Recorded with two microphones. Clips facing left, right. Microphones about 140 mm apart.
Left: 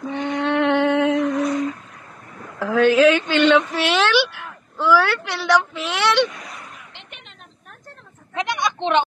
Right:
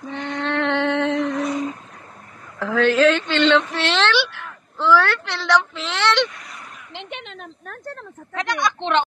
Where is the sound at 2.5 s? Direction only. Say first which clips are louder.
Left 2 dB; 5° left (ahead or behind).